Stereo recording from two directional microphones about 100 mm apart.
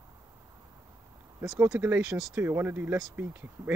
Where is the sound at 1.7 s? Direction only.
20° right (ahead or behind).